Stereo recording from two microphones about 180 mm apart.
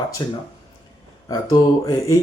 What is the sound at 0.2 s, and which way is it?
Speech, 25° left (ahead or behind).